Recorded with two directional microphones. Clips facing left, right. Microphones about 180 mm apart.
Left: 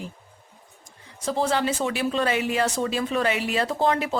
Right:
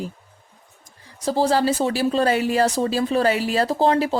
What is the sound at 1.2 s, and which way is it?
Speech, 35° right (ahead or behind).